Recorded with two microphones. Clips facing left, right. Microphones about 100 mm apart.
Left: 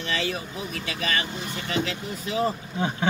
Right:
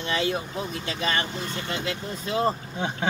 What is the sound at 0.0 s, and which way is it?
Speech, 25° right (ahead or behind).